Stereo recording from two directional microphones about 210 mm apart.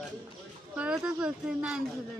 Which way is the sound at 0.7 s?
5° right (ahead or behind).